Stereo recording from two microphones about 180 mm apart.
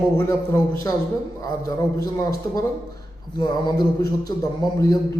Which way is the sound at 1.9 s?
20° left (ahead or behind).